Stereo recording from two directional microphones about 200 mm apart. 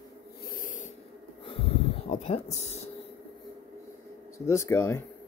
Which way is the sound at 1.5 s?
30° left (ahead or behind).